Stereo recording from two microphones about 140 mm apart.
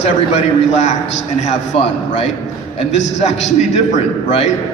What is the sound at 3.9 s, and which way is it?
Speech, 50° left (ahead or behind).